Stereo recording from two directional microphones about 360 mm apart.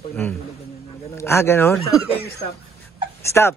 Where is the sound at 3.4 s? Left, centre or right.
Centre.